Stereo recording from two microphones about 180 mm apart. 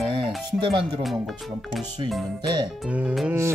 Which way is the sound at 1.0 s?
Centre (ahead or behind).